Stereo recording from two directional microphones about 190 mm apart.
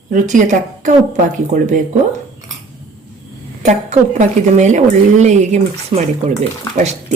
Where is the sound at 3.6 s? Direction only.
40° right (ahead or behind).